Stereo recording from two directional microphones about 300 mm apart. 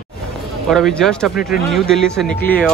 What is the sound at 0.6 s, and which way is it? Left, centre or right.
Speech, centre.